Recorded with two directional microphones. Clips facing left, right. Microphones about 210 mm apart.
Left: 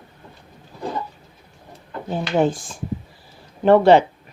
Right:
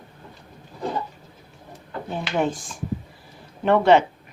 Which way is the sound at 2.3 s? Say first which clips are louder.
Left 5 dB; 30° left (ahead or behind).